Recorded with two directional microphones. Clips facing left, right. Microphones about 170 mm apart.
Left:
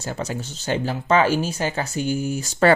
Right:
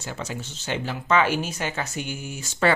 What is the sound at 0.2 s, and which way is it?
Speech, 40° left (ahead or behind).